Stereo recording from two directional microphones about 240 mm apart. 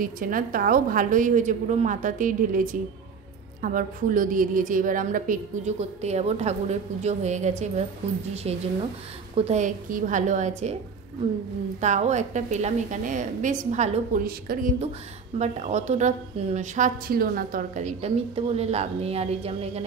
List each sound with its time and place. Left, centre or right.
0.0 s a woman's voice: right
11.8 s a woman's voice: right